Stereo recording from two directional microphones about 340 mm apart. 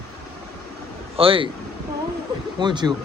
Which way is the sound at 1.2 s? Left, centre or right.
Centre.